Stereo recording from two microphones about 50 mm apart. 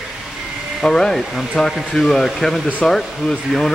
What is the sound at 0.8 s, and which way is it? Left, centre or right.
Speech, centre.